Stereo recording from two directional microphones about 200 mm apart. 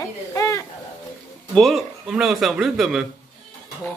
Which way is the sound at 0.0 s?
15° left (ahead or behind).